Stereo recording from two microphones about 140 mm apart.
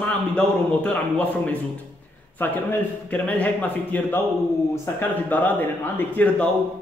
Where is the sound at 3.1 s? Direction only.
10° left (ahead or behind).